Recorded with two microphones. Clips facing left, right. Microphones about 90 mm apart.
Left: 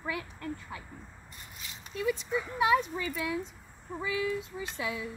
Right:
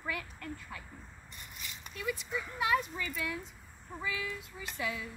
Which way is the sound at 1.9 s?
25° left (ahead or behind).